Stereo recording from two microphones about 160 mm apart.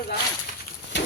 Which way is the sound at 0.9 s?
90° left.